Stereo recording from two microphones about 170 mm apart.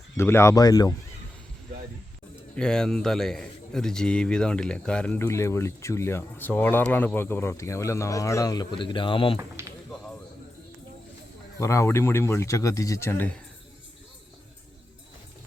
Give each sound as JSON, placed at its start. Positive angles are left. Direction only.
{"t": 0.2, "sound": "speech", "side_deg": 15}
{"t": 2.6, "sound": "a man's voice", "side_deg": 5}
{"t": 11.6, "sound": "a man's voice", "side_deg": 15}